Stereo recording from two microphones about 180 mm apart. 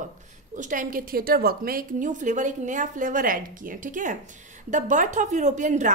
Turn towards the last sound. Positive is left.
turn(degrees=-45)  # may be behind; listen again after turning